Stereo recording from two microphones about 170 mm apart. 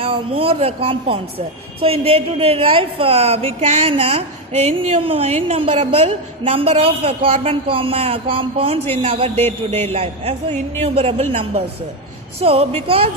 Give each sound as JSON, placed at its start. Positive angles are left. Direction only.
{"t": 0.0, "sound": "speech", "side_deg": -35}